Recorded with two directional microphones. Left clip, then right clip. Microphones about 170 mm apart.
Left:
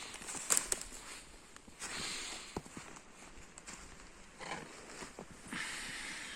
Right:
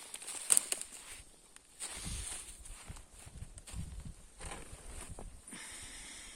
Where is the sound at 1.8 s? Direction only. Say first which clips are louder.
Left 5 dB; 15° right (ahead or behind).